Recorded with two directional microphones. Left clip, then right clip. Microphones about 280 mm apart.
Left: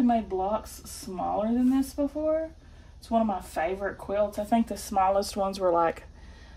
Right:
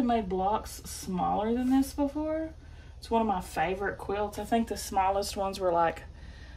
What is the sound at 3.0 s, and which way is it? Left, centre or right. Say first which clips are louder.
Speech: left 1 dB; centre.